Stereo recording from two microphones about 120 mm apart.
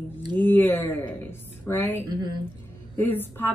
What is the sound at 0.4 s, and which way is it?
A woman's voice, 15° left (ahead or behind).